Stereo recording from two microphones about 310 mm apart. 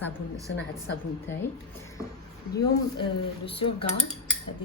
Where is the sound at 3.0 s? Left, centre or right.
Centre.